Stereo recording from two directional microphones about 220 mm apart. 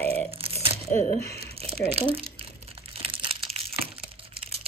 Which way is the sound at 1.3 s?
45° left (ahead or behind).